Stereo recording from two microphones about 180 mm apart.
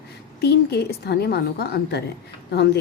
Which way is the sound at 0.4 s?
65° left (ahead or behind).